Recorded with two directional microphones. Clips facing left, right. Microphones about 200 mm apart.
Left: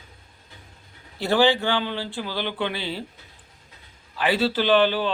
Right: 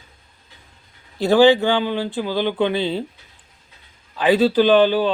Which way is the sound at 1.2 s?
15° right (ahead or behind).